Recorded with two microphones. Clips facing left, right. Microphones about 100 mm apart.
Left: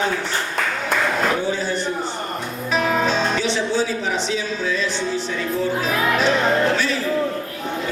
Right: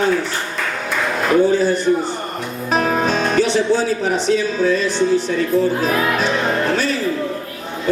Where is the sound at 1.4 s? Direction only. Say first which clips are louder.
Right 8 dB; 45° right (ahead or behind).